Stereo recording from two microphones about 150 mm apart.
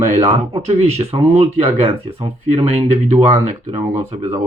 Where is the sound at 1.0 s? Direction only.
40° right (ahead or behind).